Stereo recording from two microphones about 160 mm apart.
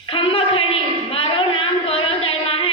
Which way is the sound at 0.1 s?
35° left (ahead or behind).